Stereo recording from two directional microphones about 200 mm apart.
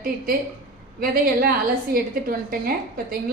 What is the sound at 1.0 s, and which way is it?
A woman's voice, 45° right (ahead or behind).